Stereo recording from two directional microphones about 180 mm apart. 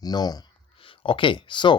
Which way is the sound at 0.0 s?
20° left (ahead or behind).